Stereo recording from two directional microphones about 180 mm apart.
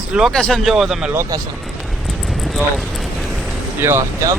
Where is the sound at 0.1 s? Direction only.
Centre (ahead or behind).